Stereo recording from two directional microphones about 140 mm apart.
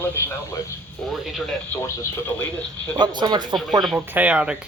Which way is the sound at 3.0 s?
30° right (ahead or behind).